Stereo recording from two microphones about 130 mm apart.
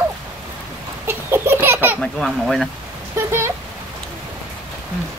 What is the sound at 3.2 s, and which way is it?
Speech, 20° right (ahead or behind).